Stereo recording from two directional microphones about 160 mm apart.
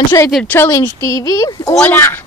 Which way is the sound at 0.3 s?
10° left (ahead or behind).